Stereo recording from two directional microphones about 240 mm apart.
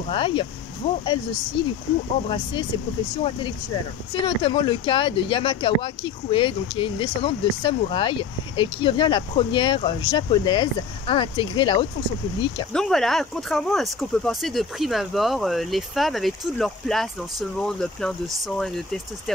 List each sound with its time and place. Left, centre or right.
0.1 s speech: left
2.2 s speech: left
12.7 s speech: centre